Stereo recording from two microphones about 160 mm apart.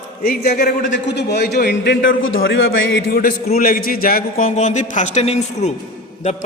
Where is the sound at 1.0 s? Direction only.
90° left.